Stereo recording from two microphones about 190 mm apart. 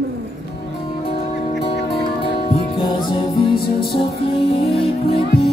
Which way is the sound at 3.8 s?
55° left (ahead or behind).